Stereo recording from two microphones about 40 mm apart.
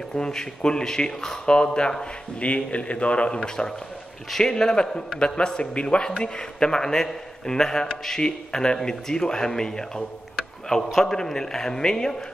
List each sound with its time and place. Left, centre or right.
0.1 s a man's voice: centre
2.4 s a man's voice: left; by 12.2 s centre